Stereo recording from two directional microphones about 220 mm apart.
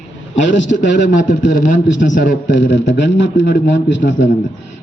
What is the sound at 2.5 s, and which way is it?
A man's voice, 55° left (ahead or behind).